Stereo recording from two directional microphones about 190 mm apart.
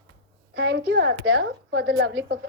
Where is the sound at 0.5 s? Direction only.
65° right (ahead or behind).